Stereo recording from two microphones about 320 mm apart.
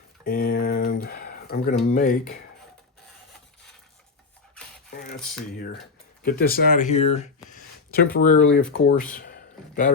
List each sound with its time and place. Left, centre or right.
0.3 s speech: left
4.9 s a sound: left
6.2 s a man's voice: left